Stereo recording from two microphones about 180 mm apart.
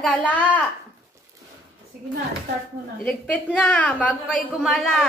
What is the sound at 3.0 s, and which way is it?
A woman's voice, 10° left (ahead or behind).